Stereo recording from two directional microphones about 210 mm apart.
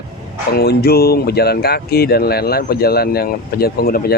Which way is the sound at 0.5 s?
50° left (ahead or behind).